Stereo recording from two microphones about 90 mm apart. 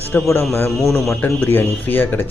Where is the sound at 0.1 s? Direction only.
20° left (ahead or behind).